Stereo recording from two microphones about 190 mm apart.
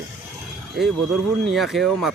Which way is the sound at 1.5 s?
Centre (ahead or behind).